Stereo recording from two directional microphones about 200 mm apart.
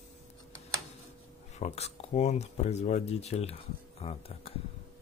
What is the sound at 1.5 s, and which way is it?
Speech, 30° left (ahead or behind).